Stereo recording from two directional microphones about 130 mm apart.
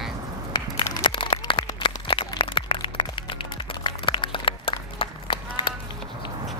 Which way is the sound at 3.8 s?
40° left (ahead or behind).